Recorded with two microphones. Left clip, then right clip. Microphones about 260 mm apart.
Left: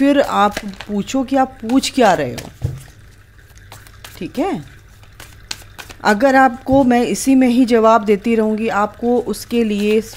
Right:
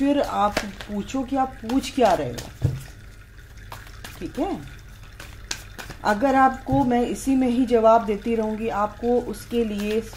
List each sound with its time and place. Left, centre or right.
0.0 s speech: left
5.9 s speech: left